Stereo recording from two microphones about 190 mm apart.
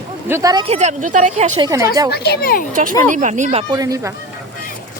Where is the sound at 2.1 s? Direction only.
55° left (ahead or behind).